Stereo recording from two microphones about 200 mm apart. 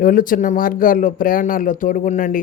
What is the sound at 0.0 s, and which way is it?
Speech, 45° left (ahead or behind).